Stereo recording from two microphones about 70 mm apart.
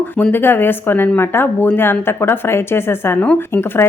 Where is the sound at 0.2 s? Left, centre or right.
Left.